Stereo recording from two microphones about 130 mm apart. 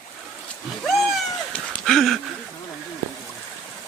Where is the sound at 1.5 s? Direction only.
5° left (ahead or behind).